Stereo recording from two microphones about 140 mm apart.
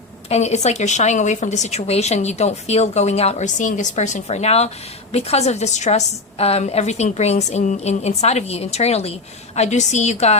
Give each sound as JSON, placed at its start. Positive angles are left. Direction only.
{"t": 0.3, "sound": "a woman's voice", "side_deg": 55}